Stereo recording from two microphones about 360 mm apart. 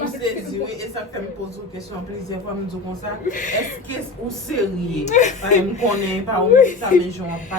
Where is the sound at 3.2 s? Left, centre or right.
Left.